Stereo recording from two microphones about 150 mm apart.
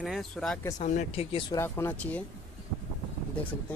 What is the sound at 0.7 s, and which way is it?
Speech, 50° left (ahead or behind).